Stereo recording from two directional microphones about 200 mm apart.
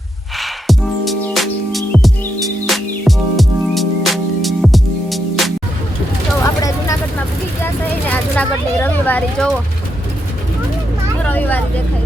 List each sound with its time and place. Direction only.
0.3 s music: centre (ahead or behind)
6.4 s vehicle: 15° left (ahead or behind)
8.1 s vehicle: 10° left (ahead or behind)
11.2 s vehicle: 10° left (ahead or behind)